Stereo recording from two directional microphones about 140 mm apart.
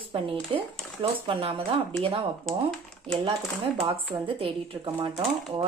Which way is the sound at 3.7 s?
40° right (ahead or behind).